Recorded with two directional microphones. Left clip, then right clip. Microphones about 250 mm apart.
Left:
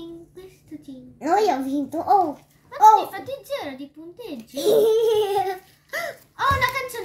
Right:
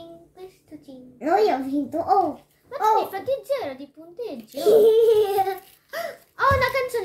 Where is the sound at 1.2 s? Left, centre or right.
Centre.